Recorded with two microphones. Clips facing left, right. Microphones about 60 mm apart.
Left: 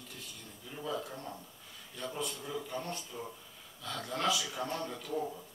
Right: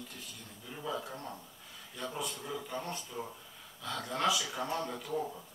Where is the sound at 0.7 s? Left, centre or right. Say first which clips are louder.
Even; centre.